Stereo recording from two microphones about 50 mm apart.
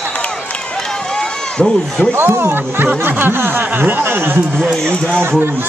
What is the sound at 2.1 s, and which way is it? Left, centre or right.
Speech, right.